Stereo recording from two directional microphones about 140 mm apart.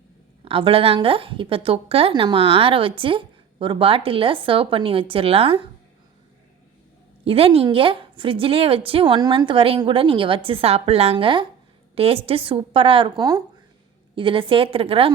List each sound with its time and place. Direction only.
0.4 s a woman's voice: 40° right (ahead or behind)
7.3 s a woman's voice: 45° right (ahead or behind)